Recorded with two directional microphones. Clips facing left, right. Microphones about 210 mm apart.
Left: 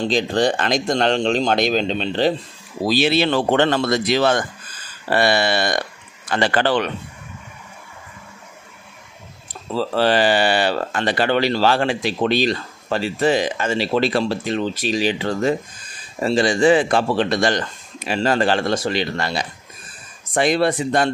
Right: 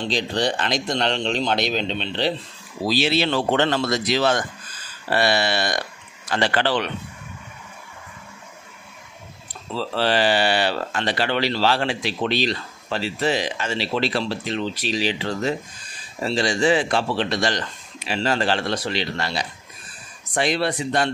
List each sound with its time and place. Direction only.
0.0 s speech: 45° left (ahead or behind)
2.9 s speech: 55° left (ahead or behind)
9.5 s speech: 45° left (ahead or behind)